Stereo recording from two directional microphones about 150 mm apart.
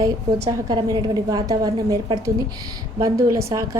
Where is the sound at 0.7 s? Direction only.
30° right (ahead or behind).